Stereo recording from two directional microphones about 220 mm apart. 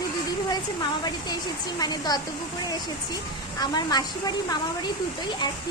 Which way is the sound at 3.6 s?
20° left (ahead or behind).